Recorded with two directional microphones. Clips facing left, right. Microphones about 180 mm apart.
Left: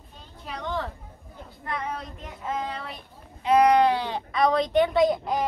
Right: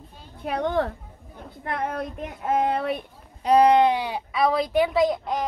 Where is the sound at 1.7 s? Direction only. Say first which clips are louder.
Right 4 dB; 55° right (ahead or behind).